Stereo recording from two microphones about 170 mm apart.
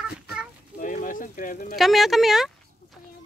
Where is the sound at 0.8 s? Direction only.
50° left (ahead or behind).